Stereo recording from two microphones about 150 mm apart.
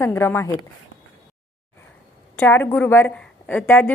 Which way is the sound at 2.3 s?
15° left (ahead or behind).